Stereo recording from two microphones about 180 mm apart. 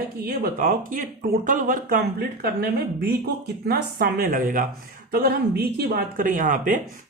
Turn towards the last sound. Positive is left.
turn(degrees=-45)  # may be behind; listen again after turning